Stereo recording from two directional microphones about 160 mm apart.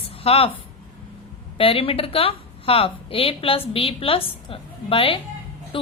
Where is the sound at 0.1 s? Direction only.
35° left (ahead or behind).